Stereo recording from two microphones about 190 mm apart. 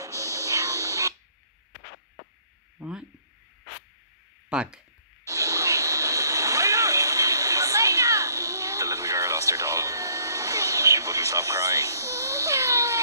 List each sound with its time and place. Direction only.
0.0 s music: 15° right (ahead or behind)
2.8 s speech: 5° right (ahead or behind)
4.5 s speech: 5° right (ahead or behind)
5.2 s a sound: 15° right (ahead or behind)